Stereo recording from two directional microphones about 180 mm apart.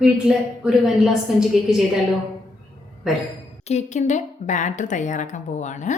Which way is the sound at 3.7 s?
40° left (ahead or behind).